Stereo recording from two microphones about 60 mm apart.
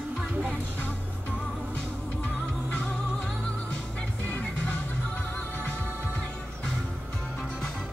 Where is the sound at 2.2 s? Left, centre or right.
Centre.